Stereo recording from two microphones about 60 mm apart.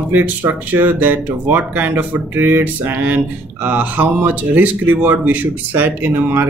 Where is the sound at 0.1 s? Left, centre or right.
Right.